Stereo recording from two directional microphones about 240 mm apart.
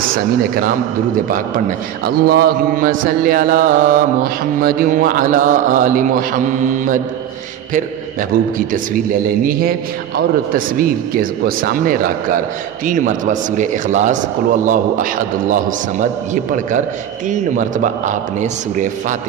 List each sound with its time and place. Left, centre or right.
0.1 s mantra: right
17.3 s mantra: right